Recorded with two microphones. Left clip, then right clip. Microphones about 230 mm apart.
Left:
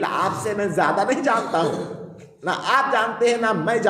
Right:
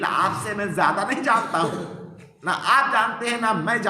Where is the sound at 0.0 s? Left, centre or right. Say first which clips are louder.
Even; centre.